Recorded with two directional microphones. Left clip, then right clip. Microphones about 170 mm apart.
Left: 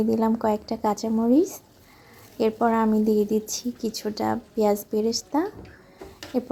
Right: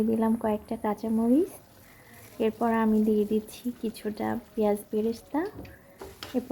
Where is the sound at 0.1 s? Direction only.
20° left (ahead or behind).